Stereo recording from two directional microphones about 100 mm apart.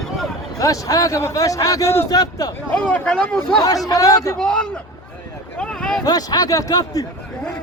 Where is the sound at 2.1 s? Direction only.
40° left (ahead or behind).